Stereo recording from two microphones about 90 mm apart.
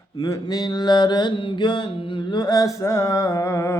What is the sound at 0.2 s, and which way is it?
Mantra, 45° left (ahead or behind).